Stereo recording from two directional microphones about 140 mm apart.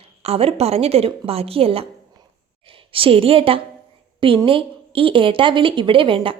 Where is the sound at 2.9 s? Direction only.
40° right (ahead or behind).